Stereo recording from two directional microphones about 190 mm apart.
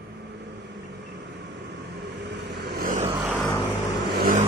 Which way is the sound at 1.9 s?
65° right (ahead or behind).